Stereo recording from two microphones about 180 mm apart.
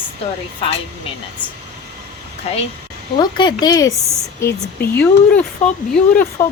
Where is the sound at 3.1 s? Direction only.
25° left (ahead or behind).